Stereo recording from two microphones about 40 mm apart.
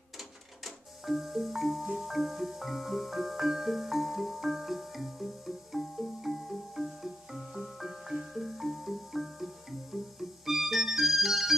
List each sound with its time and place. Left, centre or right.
0.7 s music: centre
2.0 s marimba: centre
10.4 s music: centre